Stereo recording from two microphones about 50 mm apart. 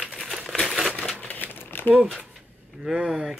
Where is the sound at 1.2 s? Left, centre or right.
Left.